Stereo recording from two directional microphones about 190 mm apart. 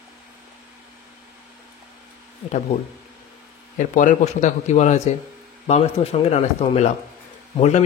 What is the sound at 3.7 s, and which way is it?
Speech, 40° left (ahead or behind).